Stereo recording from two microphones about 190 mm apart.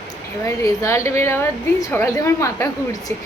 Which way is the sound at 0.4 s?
15° left (ahead or behind).